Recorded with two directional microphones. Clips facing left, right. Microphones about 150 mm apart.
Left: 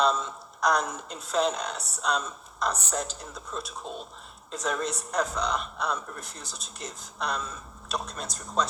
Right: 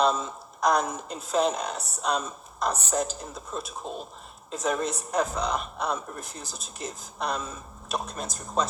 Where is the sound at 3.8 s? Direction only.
5° right (ahead or behind).